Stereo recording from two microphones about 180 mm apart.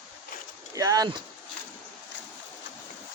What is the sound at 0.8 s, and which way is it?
Speech, 20° right (ahead or behind).